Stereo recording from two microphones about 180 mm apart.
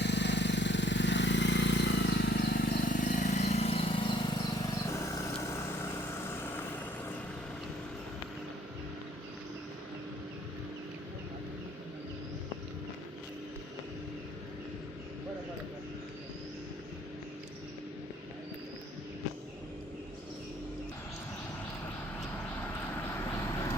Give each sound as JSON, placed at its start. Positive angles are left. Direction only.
{"t": 0.0, "sound": "vehicle", "side_deg": 75}
{"t": 4.9, "sound": "vehicle", "side_deg": 15}
{"t": 22.6, "sound": "vehicle", "side_deg": 10}